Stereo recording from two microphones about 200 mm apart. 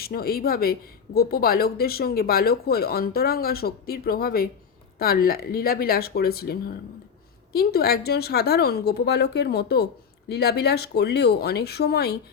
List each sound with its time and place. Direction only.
0.0 s speech: 50° left (ahead or behind)